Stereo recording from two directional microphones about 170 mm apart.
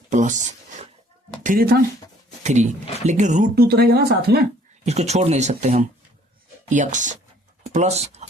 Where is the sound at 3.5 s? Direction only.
65° right (ahead or behind).